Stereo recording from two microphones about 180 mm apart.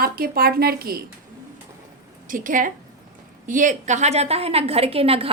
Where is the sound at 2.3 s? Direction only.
50° right (ahead or behind); by 5.3 s 30° right (ahead or behind).